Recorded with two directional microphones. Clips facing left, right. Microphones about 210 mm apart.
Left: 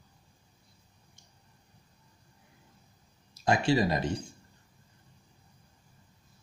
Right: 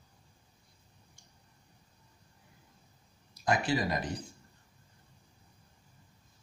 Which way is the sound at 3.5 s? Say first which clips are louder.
Left 4 dB; 25° left (ahead or behind).